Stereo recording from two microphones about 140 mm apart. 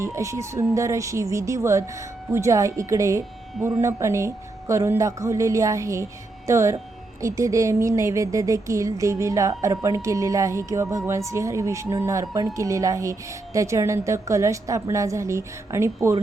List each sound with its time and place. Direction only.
0.0 s a woman's voice: 20° right (ahead or behind)